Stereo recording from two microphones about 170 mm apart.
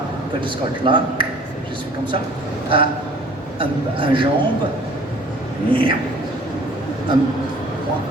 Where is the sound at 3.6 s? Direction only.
30° right (ahead or behind).